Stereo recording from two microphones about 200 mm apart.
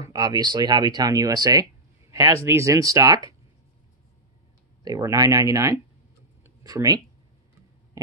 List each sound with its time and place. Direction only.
0.0 s speech: 20° right (ahead or behind)
4.8 s speech: 15° right (ahead or behind)
6.4 s a sound: 15° right (ahead or behind)